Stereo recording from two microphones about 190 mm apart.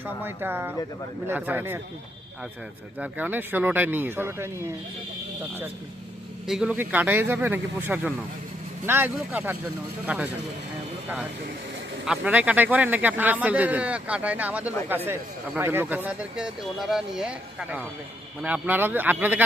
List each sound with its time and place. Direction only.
0.0 s speech: 10° right (ahead or behind)
3.0 s speech: 10° right (ahead or behind)
6.5 s speech: 5° right (ahead or behind)
12.0 s speech: 5° right (ahead or behind)